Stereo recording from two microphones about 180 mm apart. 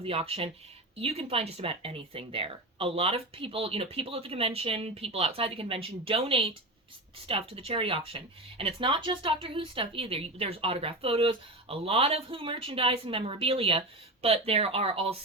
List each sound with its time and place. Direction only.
0.0 s speech: 30° right (ahead or behind)